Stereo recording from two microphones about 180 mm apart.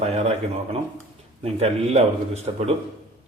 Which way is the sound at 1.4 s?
35° right (ahead or behind).